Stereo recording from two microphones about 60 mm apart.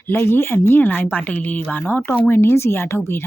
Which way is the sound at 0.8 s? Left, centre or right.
Left.